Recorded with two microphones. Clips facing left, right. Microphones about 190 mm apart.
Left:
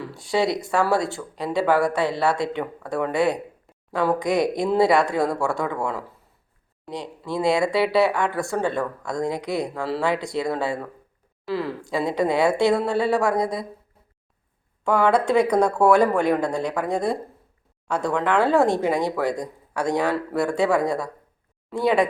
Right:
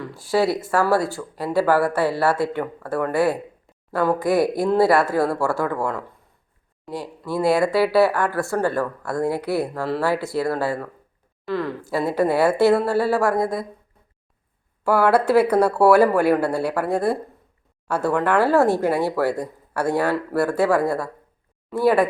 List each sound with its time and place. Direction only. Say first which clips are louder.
0.0 s speech: right 2 dB; centre (ahead or behind)
14.8 s speech: right 2 dB; 5° right (ahead or behind)